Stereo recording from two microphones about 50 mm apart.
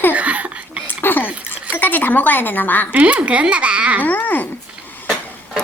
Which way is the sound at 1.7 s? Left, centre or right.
Left.